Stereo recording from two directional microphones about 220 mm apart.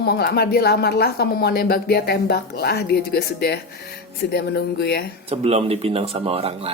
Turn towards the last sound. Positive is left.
turn(degrees=-25)  # may be behind; listen again after turning